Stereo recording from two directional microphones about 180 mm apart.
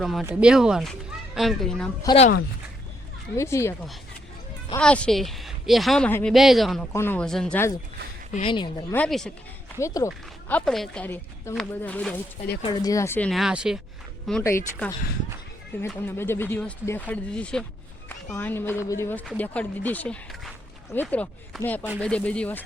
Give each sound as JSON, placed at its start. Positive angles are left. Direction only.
{"t": 0.0, "sound": "speech", "side_deg": 0}
{"t": 3.3, "sound": "speech", "side_deg": 15}
{"t": 4.8, "sound": "speech", "side_deg": 5}
{"t": 6.9, "sound": "speech", "side_deg": 10}
{"t": 8.3, "sound": "speech", "side_deg": 30}
{"t": 8.9, "sound": "speech", "side_deg": 5}
{"t": 9.8, "sound": "speech", "side_deg": 15}
{"t": 10.5, "sound": "speech", "side_deg": 5}
{"t": 12.6, "sound": "speech", "side_deg": 25}
{"t": 14.4, "sound": "speech", "side_deg": 15}